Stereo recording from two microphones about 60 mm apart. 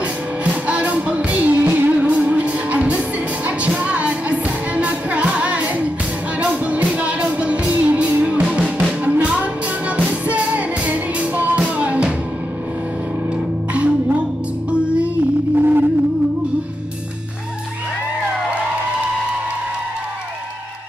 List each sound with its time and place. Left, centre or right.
0.0 s music: right
9.0 s music: right
13.7 s music: right
15.5 s music: right